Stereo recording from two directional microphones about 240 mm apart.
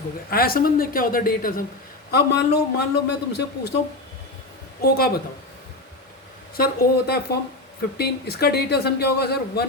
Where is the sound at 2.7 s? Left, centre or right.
Left.